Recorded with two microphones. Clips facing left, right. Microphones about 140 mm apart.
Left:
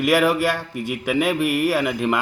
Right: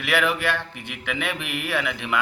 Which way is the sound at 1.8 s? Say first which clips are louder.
Left 5 dB; 45° left (ahead or behind).